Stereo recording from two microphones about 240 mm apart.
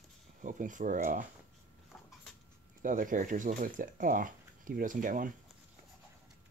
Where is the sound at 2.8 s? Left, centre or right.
Right.